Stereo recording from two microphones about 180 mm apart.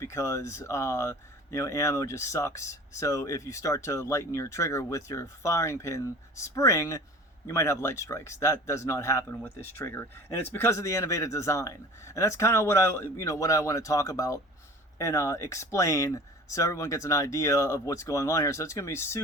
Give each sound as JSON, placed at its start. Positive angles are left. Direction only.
{"t": 0.0, "sound": "speech", "side_deg": 15}